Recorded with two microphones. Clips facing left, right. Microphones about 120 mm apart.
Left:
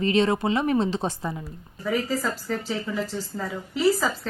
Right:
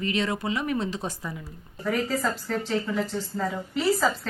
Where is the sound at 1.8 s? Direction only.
Centre (ahead or behind).